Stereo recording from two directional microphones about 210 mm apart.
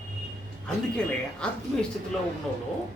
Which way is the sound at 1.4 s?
5° left (ahead or behind).